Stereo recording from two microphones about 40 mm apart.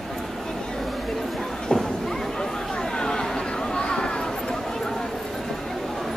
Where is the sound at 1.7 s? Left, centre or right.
Left.